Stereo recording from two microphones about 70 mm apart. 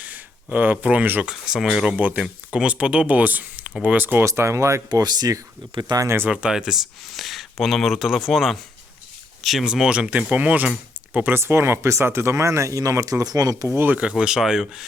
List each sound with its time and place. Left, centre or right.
0.0 s speech: right
1.2 s speech: centre; by 4.2 s right
4.2 s speech: right
4.9 s speech: right
6.3 s speech: centre
10.1 s speech: right
11.2 s speech: right
13.7 s speech: right
13.9 s speech: centre